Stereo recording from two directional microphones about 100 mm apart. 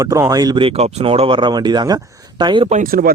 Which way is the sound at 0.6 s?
80° right.